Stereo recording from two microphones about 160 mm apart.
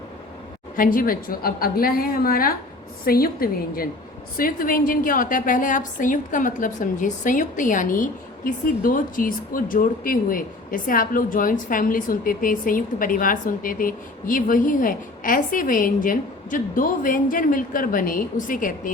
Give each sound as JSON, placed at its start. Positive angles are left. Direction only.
{"t": 0.8, "sound": "a woman's voice", "side_deg": 60}